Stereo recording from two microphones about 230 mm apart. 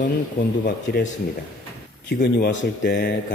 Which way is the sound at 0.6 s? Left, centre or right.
Left.